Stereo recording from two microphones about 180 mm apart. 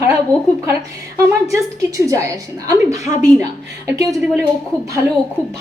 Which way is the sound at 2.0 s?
15° right (ahead or behind).